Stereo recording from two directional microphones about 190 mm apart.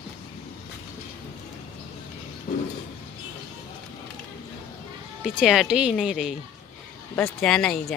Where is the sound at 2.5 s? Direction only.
35° left (ahead or behind).